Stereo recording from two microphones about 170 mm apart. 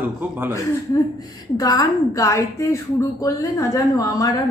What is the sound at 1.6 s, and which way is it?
A woman's voice, 20° left (ahead or behind).